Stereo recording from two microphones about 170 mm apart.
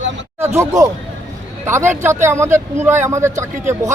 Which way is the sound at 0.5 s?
15° right (ahead or behind).